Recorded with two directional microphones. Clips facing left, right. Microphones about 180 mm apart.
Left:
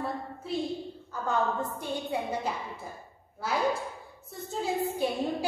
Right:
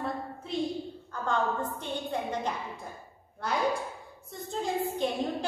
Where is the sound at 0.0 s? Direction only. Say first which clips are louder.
Even; 5° left (ahead or behind).